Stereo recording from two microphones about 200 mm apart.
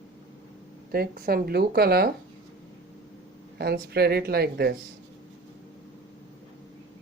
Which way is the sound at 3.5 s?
55° right (ahead or behind).